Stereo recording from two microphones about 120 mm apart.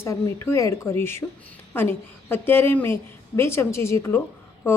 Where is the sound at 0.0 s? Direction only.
25° left (ahead or behind).